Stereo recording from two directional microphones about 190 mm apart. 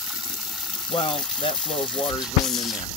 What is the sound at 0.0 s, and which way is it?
Water, 5° right (ahead or behind).